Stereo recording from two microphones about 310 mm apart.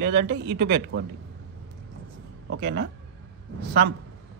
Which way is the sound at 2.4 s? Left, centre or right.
Right.